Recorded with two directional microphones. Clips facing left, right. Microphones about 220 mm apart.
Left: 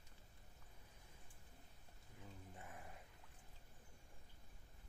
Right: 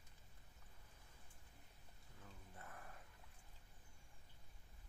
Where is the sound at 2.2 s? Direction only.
15° left (ahead or behind).